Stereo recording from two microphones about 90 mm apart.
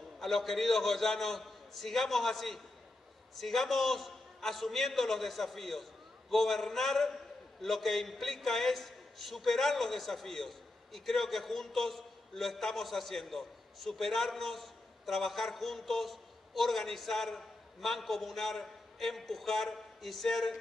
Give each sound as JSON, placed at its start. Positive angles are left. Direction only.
{"t": 0.2, "sound": "a man's voice", "side_deg": 5}